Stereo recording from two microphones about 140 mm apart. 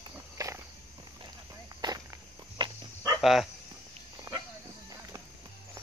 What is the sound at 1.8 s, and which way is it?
Walk, 30° right (ahead or behind).